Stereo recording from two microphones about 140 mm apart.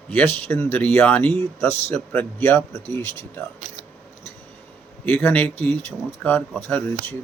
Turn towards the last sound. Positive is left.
turn(degrees=15)  # may be behind; listen again after turning